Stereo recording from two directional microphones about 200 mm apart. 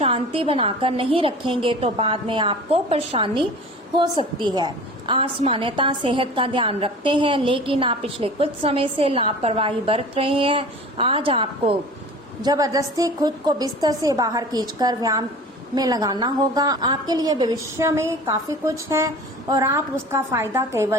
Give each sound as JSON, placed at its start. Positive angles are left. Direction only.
{"t": 0.0, "sound": "a woman's voice", "side_deg": -25}